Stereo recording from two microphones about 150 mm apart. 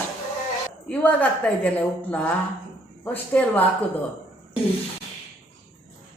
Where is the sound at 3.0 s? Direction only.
10° left (ahead or behind).